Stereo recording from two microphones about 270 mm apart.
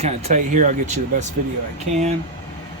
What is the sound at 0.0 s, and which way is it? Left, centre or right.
Speech, right.